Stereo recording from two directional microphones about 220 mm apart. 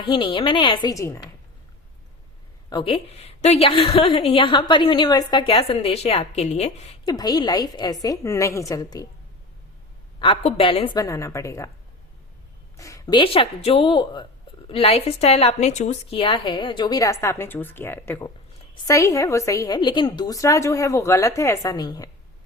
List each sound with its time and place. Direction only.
0.0 s a woman's voice: 20° left (ahead or behind)
2.6 s a woman's voice: 20° left (ahead or behind)
7.0 s a woman's voice: 15° left (ahead or behind)
10.2 s a woman's voice: 25° left (ahead or behind)
12.7 s a woman's voice: 15° left (ahead or behind)